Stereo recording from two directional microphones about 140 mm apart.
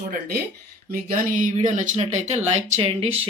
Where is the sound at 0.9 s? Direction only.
75° right (ahead or behind).